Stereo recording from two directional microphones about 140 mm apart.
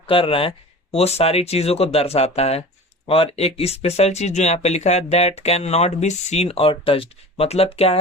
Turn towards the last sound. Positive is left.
turn(degrees=45)  # may be behind; listen again after turning